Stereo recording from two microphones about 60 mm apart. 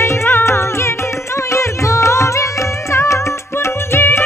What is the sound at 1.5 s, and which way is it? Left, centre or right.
Music, left.